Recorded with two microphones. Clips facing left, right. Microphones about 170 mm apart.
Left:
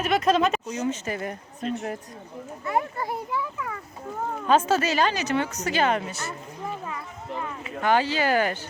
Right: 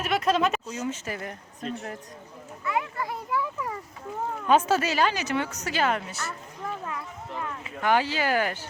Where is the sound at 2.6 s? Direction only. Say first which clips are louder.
Left 2 dB; 35° left (ahead or behind).